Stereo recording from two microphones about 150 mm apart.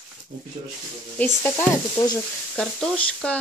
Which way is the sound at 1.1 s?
10° left (ahead or behind).